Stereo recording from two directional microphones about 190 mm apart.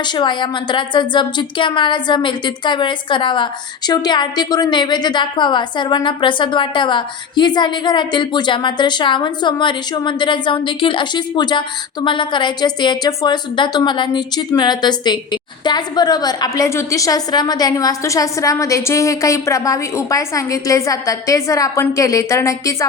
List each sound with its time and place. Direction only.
0.0 s a woman's voice: 25° left (ahead or behind)